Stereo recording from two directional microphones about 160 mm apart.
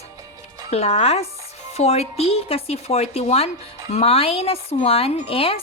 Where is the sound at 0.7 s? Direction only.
40° left (ahead or behind).